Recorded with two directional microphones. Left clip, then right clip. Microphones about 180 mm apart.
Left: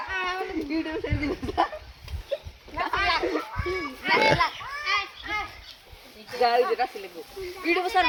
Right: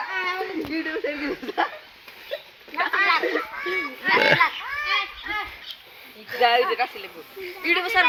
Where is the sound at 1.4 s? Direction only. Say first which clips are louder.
Even; 65° left (ahead or behind).